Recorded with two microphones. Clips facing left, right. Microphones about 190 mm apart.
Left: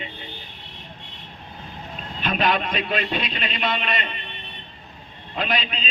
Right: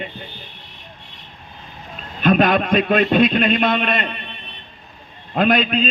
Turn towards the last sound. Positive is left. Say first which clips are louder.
# right 10 dB
turn(degrees=-50)  # may be behind; listen again after turning